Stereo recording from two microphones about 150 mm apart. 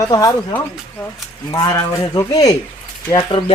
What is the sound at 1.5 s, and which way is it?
Speech, 25° left (ahead or behind).